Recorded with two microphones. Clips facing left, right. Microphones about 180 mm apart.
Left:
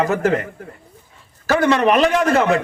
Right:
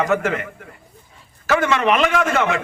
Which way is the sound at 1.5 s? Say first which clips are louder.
Left 3 dB; 35° left (ahead or behind).